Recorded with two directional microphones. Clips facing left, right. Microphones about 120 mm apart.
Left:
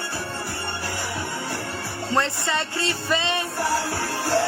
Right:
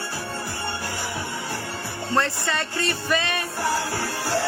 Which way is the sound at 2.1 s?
20° left (ahead or behind).